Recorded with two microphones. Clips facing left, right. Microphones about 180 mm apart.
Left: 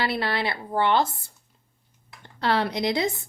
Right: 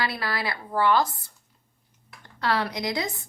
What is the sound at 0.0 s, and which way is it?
A woman's voice, 25° left (ahead or behind).